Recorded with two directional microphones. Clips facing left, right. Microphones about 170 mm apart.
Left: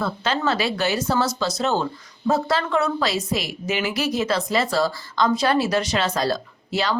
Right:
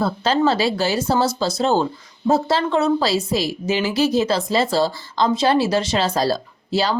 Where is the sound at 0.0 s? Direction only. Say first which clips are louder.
Right 5 dB; 30° right (ahead or behind).